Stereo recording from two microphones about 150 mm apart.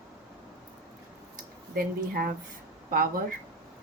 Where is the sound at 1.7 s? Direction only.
75° right (ahead or behind).